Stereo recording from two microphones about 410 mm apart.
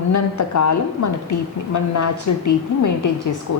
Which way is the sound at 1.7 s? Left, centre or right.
Left.